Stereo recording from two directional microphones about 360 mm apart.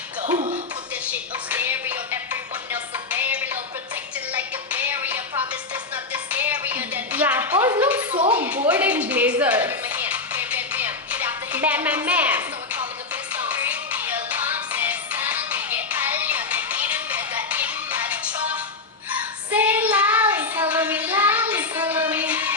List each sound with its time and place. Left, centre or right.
0.2 s music: centre
1.5 s music: centre
19.1 s child singing: centre